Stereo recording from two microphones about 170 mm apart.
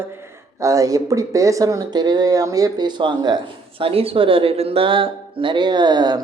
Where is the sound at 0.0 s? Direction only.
15° right (ahead or behind).